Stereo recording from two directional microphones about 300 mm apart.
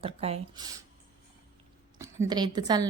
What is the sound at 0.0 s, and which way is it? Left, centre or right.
Speech, centre.